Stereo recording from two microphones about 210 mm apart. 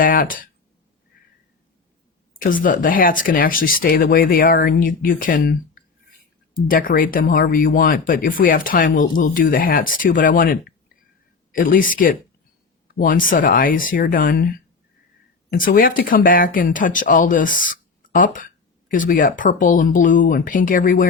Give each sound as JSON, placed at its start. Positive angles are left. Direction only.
{"t": 0.0, "sound": "speech", "side_deg": 40}
{"t": 2.4, "sound": "speech", "side_deg": 40}
{"t": 15.5, "sound": "speech", "side_deg": 40}